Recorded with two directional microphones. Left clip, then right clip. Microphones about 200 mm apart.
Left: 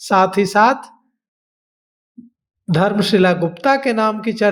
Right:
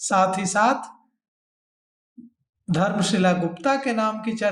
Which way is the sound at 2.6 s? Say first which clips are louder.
Left 6 dB; 40° left (ahead or behind).